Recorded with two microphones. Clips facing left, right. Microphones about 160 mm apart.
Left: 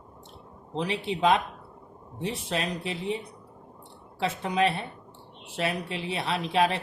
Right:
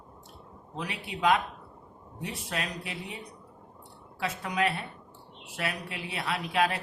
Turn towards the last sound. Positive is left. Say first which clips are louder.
# left 3 dB
turn(degrees=25)  # may be behind; listen again after turning